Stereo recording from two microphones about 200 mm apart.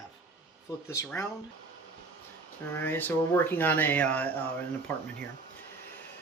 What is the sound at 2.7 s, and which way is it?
Speech, 10° left (ahead or behind).